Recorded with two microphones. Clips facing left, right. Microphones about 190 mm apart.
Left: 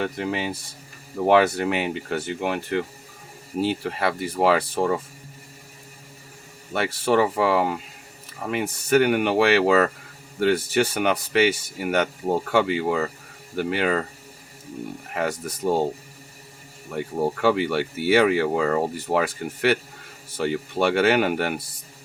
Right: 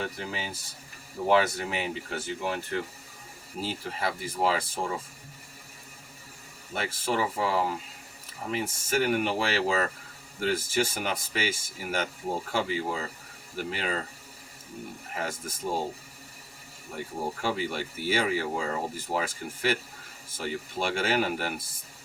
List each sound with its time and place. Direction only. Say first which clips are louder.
0.0 s speech: left 8 dB; 65° left (ahead or behind)
6.7 s speech: left 8 dB; 70° left (ahead or behind)
15.1 s speech: left 8 dB; 65° left (ahead or behind)
17.4 s speech: left 10 dB; 70° left (ahead or behind)